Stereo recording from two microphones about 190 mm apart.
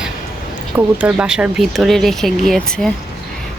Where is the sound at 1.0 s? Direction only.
5° right (ahead or behind).